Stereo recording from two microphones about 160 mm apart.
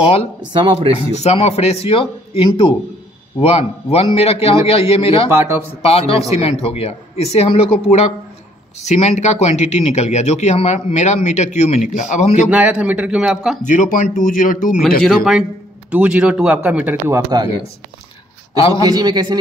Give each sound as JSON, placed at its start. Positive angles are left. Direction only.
{"t": 0.0, "sound": "speech", "side_deg": 35}
{"t": 0.4, "sound": "speech", "side_deg": -30}
{"t": 1.1, "sound": "speech", "side_deg": 40}
{"t": 5.3, "sound": "speech", "side_deg": -15}
{"t": 5.8, "sound": "speech", "side_deg": 35}
{"t": 12.4, "sound": "speech", "side_deg": -10}
{"t": 13.7, "sound": "speech", "side_deg": 55}
{"t": 15.0, "sound": "speech", "side_deg": -5}
{"t": 18.8, "sound": "a man's voice", "side_deg": -25}